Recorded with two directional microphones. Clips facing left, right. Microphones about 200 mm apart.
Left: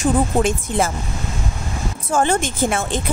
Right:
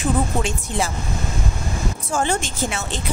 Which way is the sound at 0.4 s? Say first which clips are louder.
Left 5 dB; 50° left (ahead or behind).